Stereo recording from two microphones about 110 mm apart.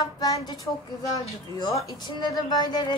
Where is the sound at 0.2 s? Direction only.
35° left (ahead or behind).